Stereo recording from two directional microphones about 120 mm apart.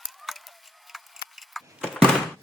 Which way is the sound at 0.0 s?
Centre (ahead or behind).